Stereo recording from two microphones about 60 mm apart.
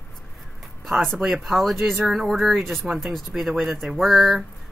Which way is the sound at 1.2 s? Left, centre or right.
Centre.